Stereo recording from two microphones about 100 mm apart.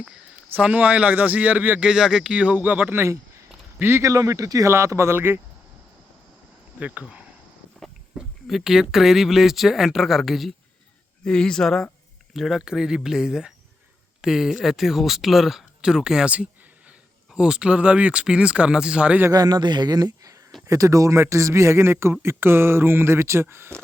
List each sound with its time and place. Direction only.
0.5 s speech: 15° right (ahead or behind)
6.7 s speech: 15° right (ahead or behind)
7.8 s speech: centre (ahead or behind)
19.3 s speech: 45° right (ahead or behind); by 23.7 s 25° right (ahead or behind)